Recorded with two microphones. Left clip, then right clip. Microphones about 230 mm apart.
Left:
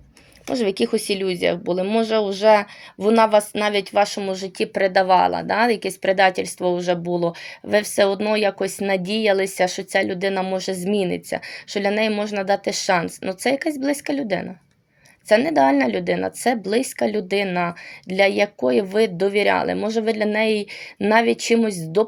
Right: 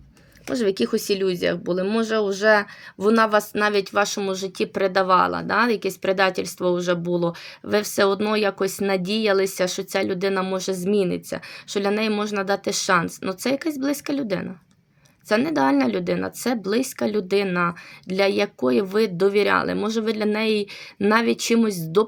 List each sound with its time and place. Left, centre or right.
0.7 s speech: centre